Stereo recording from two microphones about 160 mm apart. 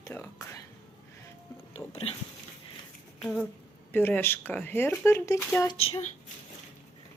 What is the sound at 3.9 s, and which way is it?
Speech, 10° left (ahead or behind).